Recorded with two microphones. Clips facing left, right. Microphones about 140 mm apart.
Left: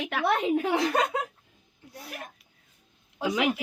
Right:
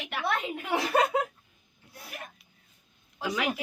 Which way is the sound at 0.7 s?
5° right (ahead or behind).